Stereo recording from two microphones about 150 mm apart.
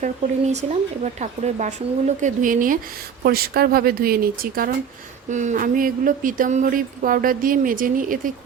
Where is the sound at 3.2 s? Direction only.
90° right.